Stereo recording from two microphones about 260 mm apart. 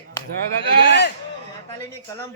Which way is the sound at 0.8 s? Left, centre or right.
Left.